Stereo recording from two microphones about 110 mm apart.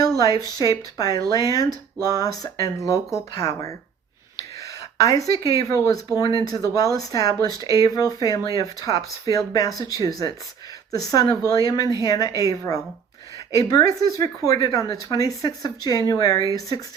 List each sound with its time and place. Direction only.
0.2 s speech: 35° left (ahead or behind)